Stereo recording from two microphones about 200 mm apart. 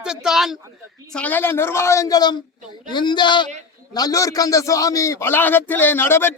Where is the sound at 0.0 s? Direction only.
5° right (ahead or behind).